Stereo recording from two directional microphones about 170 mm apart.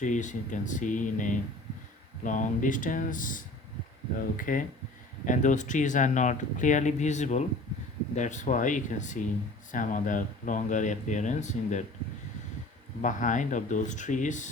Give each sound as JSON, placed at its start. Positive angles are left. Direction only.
{"t": 0.0, "sound": "speech", "side_deg": 45}
{"t": 13.0, "sound": "speech", "side_deg": 50}